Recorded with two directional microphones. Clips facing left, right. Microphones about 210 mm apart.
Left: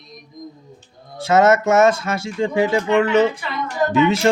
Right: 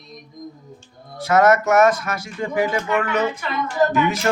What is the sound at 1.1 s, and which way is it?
A woman's voice, 25° left (ahead or behind).